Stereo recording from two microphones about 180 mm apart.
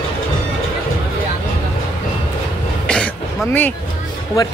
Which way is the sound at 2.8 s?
5° left (ahead or behind).